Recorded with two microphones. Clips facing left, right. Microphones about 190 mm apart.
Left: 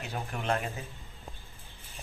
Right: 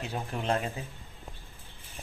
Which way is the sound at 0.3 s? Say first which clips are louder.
Right 4 dB; 25° right (ahead or behind).